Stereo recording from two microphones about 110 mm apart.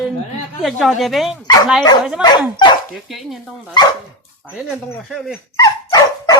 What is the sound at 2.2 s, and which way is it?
Speech, 40° left (ahead or behind).